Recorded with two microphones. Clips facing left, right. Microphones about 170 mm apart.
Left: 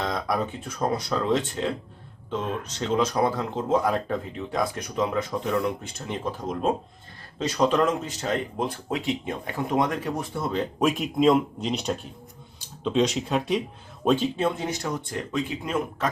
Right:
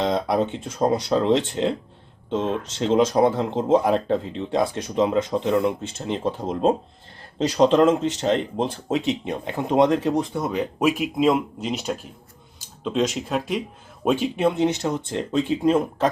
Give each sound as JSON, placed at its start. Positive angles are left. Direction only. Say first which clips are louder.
{"t": 0.0, "sound": "speech", "louder": "right 6 dB", "side_deg": -25}